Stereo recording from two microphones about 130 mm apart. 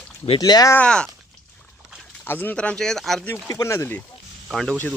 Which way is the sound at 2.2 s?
15° left (ahead or behind).